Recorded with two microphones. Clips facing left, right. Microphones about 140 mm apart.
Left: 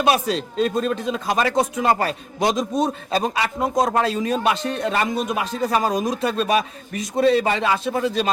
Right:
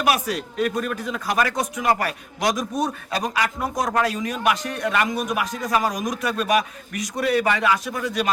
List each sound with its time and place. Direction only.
0.0 s speech: 25° left (ahead or behind)